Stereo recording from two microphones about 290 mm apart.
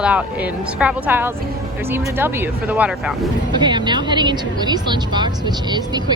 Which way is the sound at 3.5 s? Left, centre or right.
Centre.